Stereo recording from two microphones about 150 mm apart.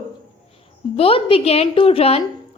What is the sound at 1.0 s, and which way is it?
A woman's voice, 40° left (ahead or behind).